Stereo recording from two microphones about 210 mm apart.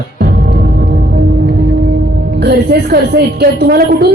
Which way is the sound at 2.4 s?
50° right (ahead or behind).